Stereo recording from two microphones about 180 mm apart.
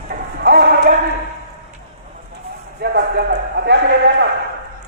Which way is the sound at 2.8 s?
65° right (ahead or behind).